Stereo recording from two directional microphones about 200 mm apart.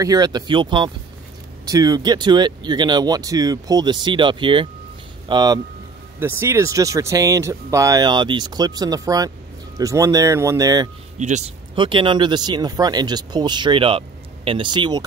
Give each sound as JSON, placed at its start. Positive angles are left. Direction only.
{"t": 0.0, "sound": "speech", "side_deg": -20}
{"t": 11.1, "sound": "speech", "side_deg": -35}
{"t": 11.7, "sound": "speech", "side_deg": -25}